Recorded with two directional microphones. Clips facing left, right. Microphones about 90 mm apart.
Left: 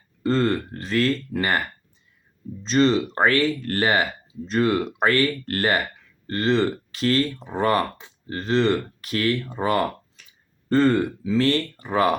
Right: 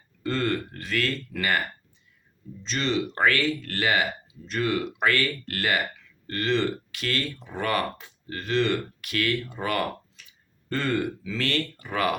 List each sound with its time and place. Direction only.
0.2 s speech: 30° left (ahead or behind)
2.6 s speech: 35° left (ahead or behind)
10.2 s a sound: 40° left (ahead or behind)
10.7 s speech: 30° left (ahead or behind)